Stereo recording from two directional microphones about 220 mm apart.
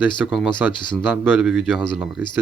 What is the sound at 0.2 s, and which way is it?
Speech, centre (ahead or behind).